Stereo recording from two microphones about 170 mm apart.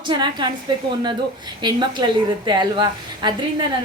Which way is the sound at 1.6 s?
25° right (ahead or behind).